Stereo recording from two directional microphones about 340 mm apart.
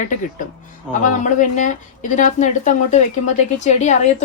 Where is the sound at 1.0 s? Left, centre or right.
Left.